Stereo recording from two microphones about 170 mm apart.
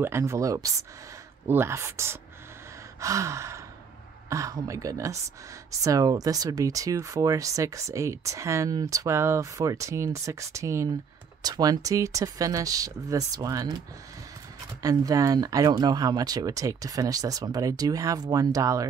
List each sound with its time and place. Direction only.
0.0 s speech: 15° right (ahead or behind)
3.0 s gasp: 20° right (ahead or behind)
4.3 s speech: 20° right (ahead or behind)